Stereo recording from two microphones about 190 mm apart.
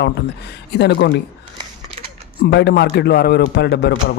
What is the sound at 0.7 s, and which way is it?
Speech, 60° left (ahead or behind).